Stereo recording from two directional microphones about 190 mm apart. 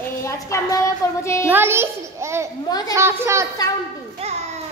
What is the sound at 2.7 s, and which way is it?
Speech, 20° left (ahead or behind).